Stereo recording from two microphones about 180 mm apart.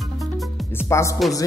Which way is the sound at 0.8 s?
15° left (ahead or behind).